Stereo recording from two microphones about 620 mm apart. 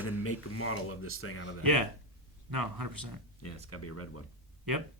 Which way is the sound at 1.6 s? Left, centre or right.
Right.